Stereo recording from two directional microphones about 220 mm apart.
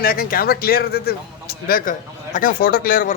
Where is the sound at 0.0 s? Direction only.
40° left (ahead or behind).